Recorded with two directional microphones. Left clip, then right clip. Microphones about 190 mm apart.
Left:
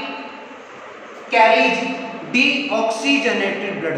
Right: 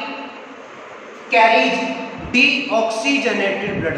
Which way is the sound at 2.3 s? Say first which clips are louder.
Right 2 dB; 20° right (ahead or behind).